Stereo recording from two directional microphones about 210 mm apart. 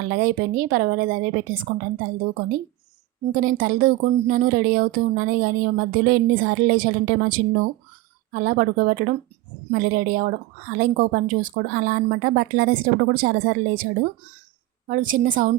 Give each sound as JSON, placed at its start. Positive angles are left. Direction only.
{"t": 0.0, "sound": "a woman's voice", "side_deg": -45}
{"t": 3.3, "sound": "a woman's voice", "side_deg": -45}